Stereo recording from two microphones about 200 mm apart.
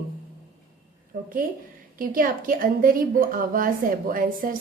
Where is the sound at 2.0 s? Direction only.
45° right (ahead or behind).